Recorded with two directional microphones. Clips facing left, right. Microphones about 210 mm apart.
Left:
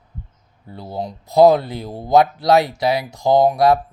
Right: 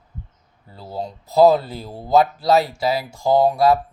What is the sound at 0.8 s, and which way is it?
Speech, 15° left (ahead or behind).